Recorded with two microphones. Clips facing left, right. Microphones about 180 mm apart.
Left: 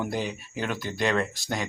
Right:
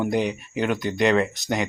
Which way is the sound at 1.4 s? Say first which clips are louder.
Right 6 dB; 20° right (ahead or behind).